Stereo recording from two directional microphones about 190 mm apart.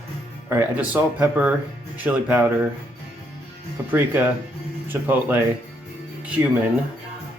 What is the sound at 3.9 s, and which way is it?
Speech, 10° right (ahead or behind).